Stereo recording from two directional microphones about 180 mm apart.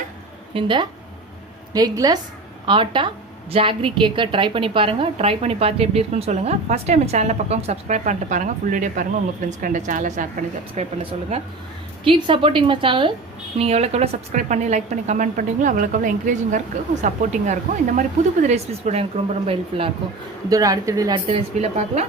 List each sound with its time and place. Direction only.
0.5 s a woman's voice: 25° right (ahead or behind)
20.5 s a woman's voice: 20° right (ahead or behind)
21.2 s a woman's voice: 35° right (ahead or behind)